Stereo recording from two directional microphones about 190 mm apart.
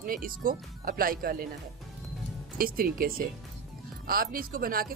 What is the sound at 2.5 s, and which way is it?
A woman's voice, 50° right (ahead or behind).